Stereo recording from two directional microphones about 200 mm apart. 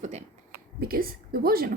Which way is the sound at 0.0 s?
35° right (ahead or behind).